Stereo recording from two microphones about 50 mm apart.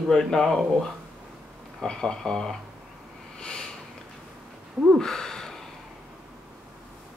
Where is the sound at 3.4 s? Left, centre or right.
Centre.